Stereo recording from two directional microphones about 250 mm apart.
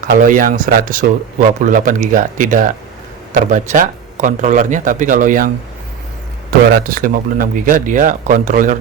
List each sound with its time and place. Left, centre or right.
0.0 s speech: right
6.7 s speech: right